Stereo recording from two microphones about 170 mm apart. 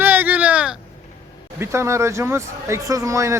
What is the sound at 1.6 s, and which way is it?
Speech, 15° right (ahead or behind).